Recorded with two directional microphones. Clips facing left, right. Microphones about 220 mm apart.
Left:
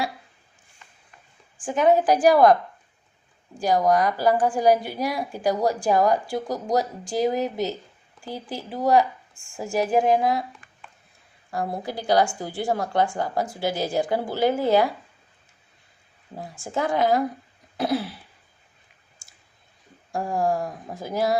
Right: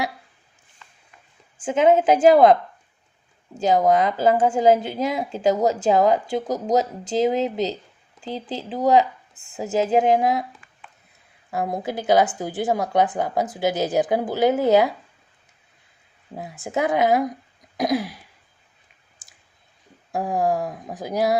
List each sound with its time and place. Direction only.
1.5 s a woman's voice: 20° right (ahead or behind)
11.5 s a woman's voice: 20° right (ahead or behind)
16.3 s a woman's voice: 20° right (ahead or behind)
17.7 s throat clearing: 15° right (ahead or behind)
19.2 s clicking: 20° right (ahead or behind)
20.7 s speech: 15° right (ahead or behind)